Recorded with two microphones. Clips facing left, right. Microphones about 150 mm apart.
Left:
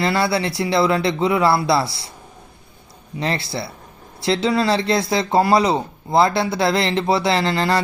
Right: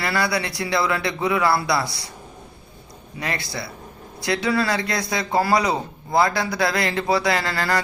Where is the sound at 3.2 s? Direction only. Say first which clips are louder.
Left 5 dB; 25° left (ahead or behind).